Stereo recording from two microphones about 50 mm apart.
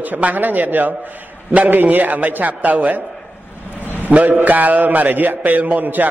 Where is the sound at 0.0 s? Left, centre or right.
Right.